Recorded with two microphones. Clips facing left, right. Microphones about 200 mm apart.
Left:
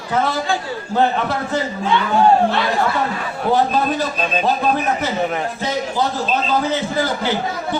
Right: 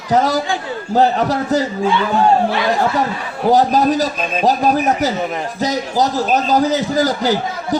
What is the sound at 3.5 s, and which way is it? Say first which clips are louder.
A man's voice: right 4 dB; 40° right (ahead or behind).